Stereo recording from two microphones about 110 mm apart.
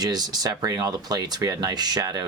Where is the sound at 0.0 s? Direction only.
40° right (ahead or behind).